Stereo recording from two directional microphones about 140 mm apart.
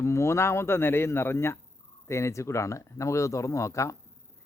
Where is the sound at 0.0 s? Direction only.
20° left (ahead or behind).